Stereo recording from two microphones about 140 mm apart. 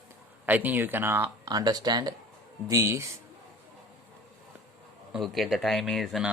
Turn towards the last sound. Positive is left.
turn(degrees=0)  # may be behind; listen again after turning